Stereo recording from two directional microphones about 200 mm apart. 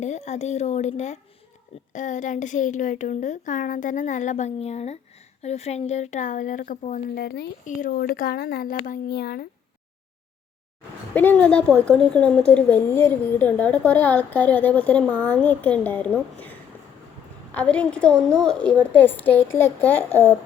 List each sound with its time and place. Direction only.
0.0 s speech: 35° left (ahead or behind)
7.3 s speech: 55° left (ahead or behind)
7.6 s speech: 40° left (ahead or behind)
11.1 s a woman's voice: 10° left (ahead or behind)
17.5 s a woman's voice: 5° left (ahead or behind)